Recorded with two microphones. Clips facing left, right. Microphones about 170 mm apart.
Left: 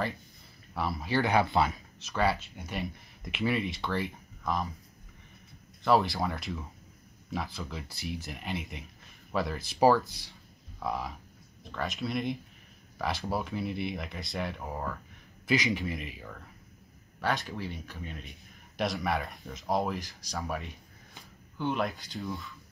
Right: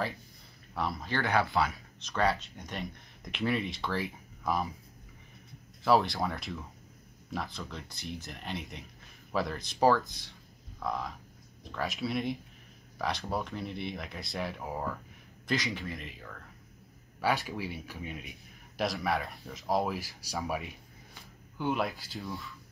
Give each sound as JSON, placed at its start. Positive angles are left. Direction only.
{"t": 0.7, "sound": "speech", "side_deg": 5}
{"t": 1.2, "sound": "speech", "side_deg": 20}
{"t": 2.0, "sound": "speech", "side_deg": 5}
{"t": 5.9, "sound": "speech", "side_deg": 0}
{"t": 15.5, "sound": "speech", "side_deg": 20}
{"t": 17.2, "sound": "speech", "side_deg": -10}